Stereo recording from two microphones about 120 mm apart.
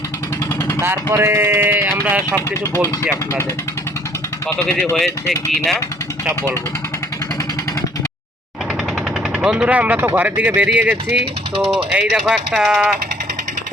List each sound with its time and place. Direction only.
0.8 s speech: 20° right (ahead or behind)
4.4 s speech: 20° left (ahead or behind)
9.4 s speech: 5° right (ahead or behind)